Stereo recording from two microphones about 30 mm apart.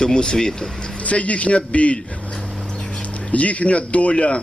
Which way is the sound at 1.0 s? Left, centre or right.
Left.